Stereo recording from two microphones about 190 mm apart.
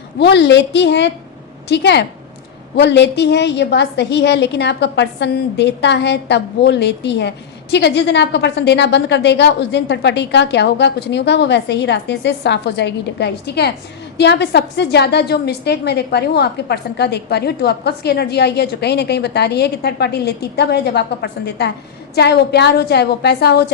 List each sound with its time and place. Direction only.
0.2 s a woman's voice: 65° left (ahead or behind)